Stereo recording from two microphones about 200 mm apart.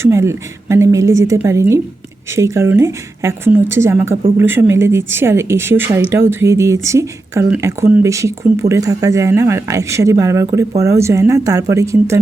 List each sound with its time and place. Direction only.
0.1 s speech: 15° right (ahead or behind)